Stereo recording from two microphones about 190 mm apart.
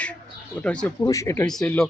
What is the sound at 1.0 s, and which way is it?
Speech, 15° left (ahead or behind).